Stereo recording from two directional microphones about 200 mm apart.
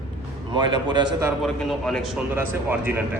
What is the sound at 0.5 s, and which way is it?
Speech, 20° right (ahead or behind).